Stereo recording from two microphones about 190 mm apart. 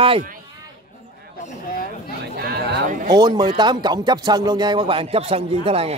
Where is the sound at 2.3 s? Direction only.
50° right (ahead or behind).